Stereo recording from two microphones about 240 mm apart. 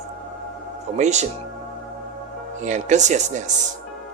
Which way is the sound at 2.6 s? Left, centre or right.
Right.